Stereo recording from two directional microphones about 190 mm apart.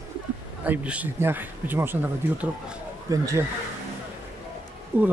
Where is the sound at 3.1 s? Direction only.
20° right (ahead or behind).